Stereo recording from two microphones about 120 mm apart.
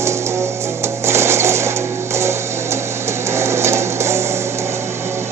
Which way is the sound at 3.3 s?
20° right (ahead or behind).